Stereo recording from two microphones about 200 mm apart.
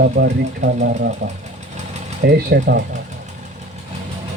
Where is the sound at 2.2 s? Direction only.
50° right (ahead or behind).